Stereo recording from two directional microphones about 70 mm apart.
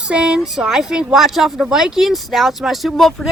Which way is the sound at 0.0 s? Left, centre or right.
Centre.